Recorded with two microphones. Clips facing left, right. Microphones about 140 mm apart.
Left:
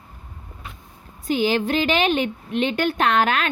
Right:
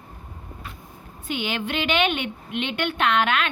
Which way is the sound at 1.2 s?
35° left (ahead or behind).